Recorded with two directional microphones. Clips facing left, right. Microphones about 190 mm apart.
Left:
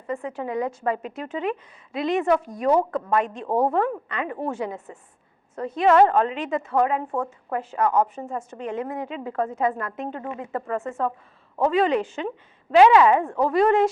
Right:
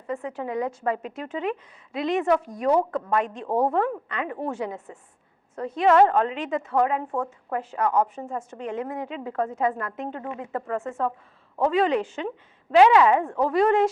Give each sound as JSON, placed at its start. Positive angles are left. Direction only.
{"t": 0.1, "sound": "a woman's voice", "side_deg": 15}
{"t": 3.4, "sound": "a woman's voice", "side_deg": 25}